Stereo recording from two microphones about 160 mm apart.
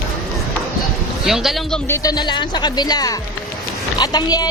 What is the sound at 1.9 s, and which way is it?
Speech, 25° left (ahead or behind).